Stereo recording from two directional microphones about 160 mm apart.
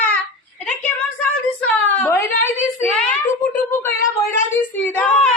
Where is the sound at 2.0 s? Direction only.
15° left (ahead or behind).